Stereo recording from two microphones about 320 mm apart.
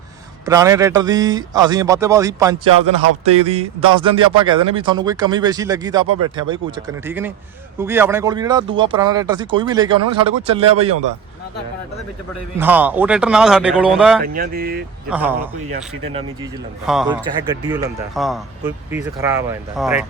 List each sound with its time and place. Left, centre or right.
0.4 s speech: centre
3.0 s a sound: right
3.9 s speech: centre
12.5 s speech: centre
14.2 s speech: right
15.1 s speech: centre
16.8 s speech: centre
17.4 s speech: centre
18.1 s speech: centre